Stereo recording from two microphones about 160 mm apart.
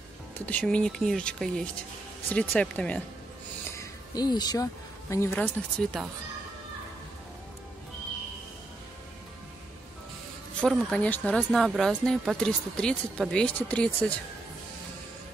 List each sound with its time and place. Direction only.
0.5 s speech: 10° left (ahead or behind)
3.7 s music: 25° left (ahead or behind)
5.1 s speech: 15° left (ahead or behind)
10.6 s speech: 5° left (ahead or behind)